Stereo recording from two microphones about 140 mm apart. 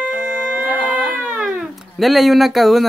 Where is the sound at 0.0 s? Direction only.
10° right (ahead or behind).